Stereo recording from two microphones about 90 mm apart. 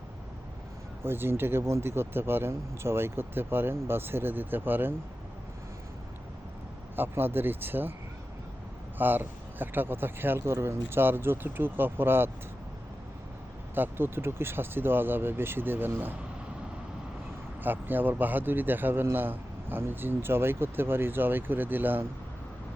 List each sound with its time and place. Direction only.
1.0 s a man's voice: 25° right (ahead or behind)
6.9 s a man's voice: 25° right (ahead or behind)
9.0 s a man's voice: 20° right (ahead or behind)
13.7 s a man's voice: 25° right (ahead or behind)
17.6 s a man's voice: 20° right (ahead or behind)